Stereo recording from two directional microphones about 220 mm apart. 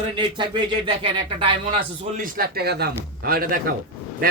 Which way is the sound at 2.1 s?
40° right (ahead or behind).